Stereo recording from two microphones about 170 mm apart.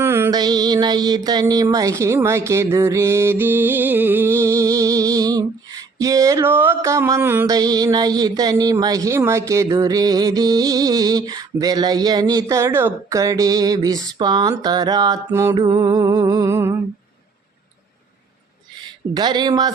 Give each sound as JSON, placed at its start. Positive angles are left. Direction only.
{"t": 0.0, "sound": "music", "side_deg": -15}
{"t": 19.1, "sound": "music", "side_deg": -25}